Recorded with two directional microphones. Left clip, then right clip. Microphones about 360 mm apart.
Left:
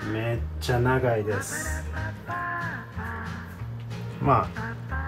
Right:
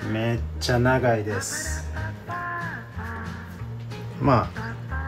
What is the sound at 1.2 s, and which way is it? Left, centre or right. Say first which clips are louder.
Music: even; centre.